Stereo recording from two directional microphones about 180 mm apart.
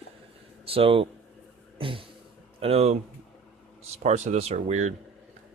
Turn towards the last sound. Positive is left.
turn(degrees=-40)  # may be behind; listen again after turning